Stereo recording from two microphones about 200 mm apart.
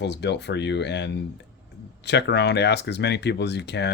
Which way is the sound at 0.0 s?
60° left (ahead or behind).